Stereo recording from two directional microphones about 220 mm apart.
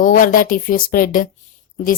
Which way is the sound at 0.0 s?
40° left (ahead or behind).